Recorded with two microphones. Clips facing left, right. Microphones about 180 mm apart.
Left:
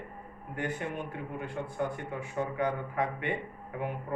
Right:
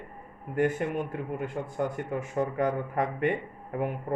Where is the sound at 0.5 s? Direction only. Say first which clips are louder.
Right 8 dB; 45° right (ahead or behind).